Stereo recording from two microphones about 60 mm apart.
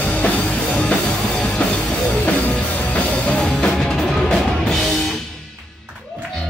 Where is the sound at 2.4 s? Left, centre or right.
Left.